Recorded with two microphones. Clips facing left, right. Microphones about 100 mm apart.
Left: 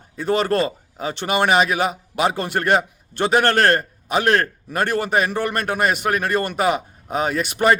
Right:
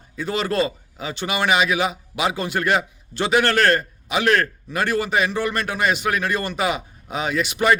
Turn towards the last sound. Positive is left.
turn(degrees=45)  # may be behind; listen again after turning